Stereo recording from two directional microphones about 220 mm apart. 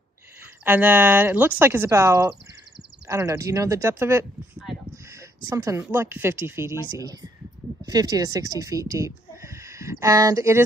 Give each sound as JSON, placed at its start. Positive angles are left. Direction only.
{"t": 0.7, "sound": "speech", "side_deg": -10}